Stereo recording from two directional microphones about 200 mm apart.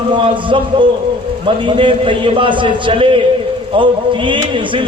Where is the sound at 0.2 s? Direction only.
25° right (ahead or behind).